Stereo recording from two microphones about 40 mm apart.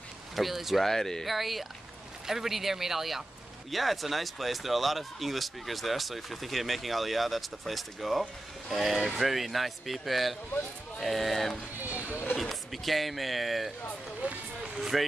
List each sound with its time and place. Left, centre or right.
0.4 s speech: centre
0.8 s speech: centre
1.2 s speech: centre
12.1 s speech: left
12.4 s speech: centre
14.2 s speech: right
14.8 s speech: centre